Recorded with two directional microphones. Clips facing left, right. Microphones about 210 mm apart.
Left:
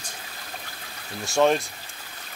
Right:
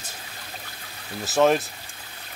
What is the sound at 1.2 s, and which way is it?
Speech, centre (ahead or behind).